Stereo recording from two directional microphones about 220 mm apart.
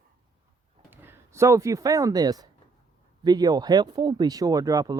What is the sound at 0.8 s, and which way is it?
Speech, 10° right (ahead or behind).